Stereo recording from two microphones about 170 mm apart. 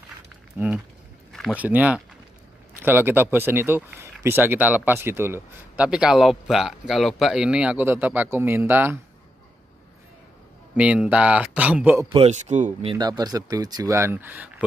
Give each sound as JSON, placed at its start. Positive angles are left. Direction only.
{"t": 0.6, "sound": "speech", "side_deg": -10}
{"t": 1.3, "sound": "a sound", "side_deg": 5}
{"t": 1.6, "sound": "speech", "side_deg": -10}
{"t": 10.8, "sound": "speech", "side_deg": -5}
{"t": 12.1, "sound": "speech", "side_deg": -40}
{"t": 12.9, "sound": "speech", "side_deg": -25}